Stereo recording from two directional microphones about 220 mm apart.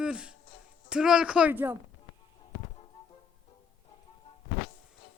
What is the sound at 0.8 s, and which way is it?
Speech, 5° right (ahead or behind).